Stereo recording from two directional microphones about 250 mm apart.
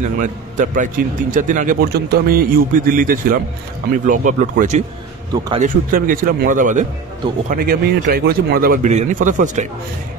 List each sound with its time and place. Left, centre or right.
0.2 s a man's voice: right